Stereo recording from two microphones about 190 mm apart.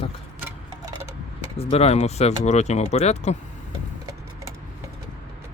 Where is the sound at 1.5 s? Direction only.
30° left (ahead or behind).